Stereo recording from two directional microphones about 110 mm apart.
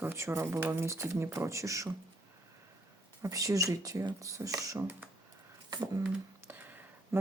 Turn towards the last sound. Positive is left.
turn(degrees=-20)  # may be behind; listen again after turning